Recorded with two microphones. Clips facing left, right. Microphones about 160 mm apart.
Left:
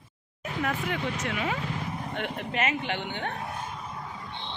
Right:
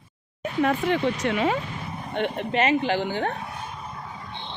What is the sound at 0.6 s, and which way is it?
Speech, 30° right (ahead or behind).